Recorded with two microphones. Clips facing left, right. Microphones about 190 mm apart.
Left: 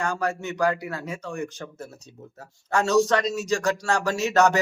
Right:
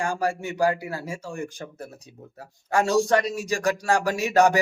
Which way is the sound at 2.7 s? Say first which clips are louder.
Even; 10° right (ahead or behind).